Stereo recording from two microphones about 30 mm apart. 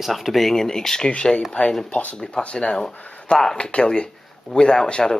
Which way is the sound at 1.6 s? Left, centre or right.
Left.